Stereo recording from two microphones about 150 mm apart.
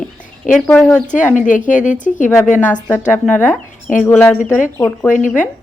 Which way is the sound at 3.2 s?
15° left (ahead or behind).